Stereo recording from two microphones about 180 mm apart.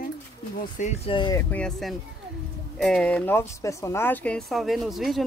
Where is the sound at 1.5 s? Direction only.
5° left (ahead or behind).